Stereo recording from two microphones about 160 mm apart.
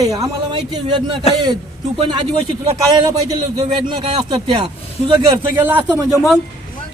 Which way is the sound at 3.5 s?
40° right (ahead or behind).